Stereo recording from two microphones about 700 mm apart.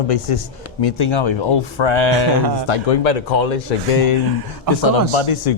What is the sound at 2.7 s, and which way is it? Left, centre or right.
Speech, left.